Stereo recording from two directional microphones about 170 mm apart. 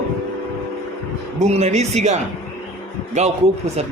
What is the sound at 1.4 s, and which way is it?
Speech, 40° right (ahead or behind).